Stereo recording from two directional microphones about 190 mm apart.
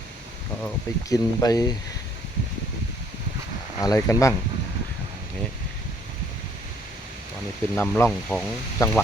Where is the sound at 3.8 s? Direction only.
20° left (ahead or behind).